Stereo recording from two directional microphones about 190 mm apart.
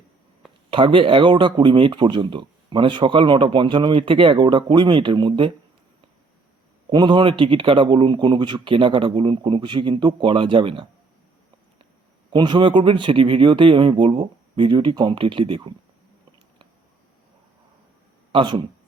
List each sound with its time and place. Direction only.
0.7 s speech: 25° right (ahead or behind)
6.9 s speech: 25° right (ahead or behind)
12.3 s speech: 25° right (ahead or behind)
18.3 s speech: 25° right (ahead or behind)